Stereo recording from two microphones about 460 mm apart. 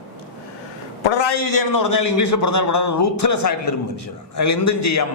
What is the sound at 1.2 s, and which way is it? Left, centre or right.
A man's voice, left.